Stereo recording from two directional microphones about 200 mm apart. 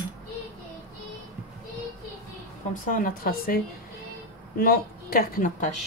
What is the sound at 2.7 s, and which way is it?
Speech, 45° left (ahead or behind).